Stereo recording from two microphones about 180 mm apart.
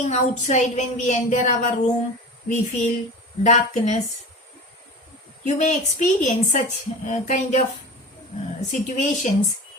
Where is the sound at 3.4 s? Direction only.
40° left (ahead or behind).